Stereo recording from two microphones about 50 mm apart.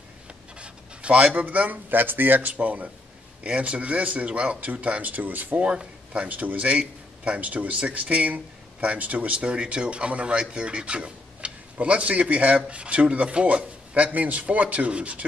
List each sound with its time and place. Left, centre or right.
0.6 s speech: right
5.6 s a man's voice: right